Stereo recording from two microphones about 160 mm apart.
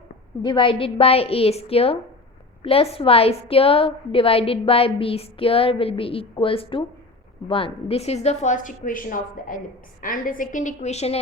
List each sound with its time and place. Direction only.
0.4 s a woman's voice: 30° left (ahead or behind)